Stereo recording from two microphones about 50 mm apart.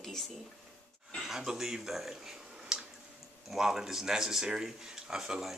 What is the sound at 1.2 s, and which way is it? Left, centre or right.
A man's voice, centre.